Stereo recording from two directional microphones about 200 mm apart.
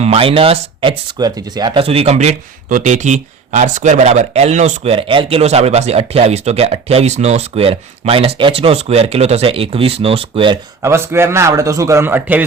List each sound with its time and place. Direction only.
0.0 s speech: 30° right (ahead or behind)
10.8 s a man's voice: 15° right (ahead or behind)